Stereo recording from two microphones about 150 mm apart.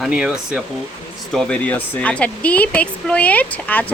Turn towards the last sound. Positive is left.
turn(degrees=10)  # may be behind; listen again after turning